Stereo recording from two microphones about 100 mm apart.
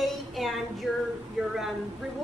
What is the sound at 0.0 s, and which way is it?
Child singing, centre (ahead or behind).